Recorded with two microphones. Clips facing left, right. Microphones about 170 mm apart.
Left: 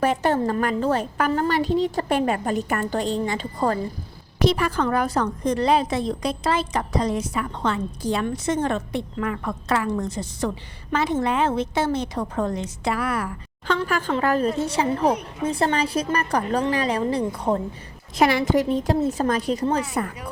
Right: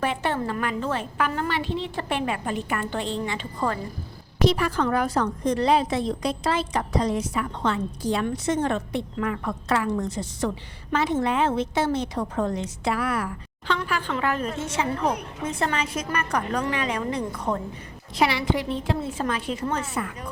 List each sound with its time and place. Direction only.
0.0 s a woman's voice: 40° left (ahead or behind)
4.4 s a woman's voice: 50° left (ahead or behind); by 17.6 s 30° left (ahead or behind)
18.2 s a woman's voice: 45° left (ahead or behind)